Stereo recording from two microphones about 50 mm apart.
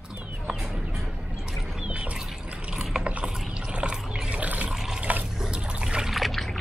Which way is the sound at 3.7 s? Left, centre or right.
Right.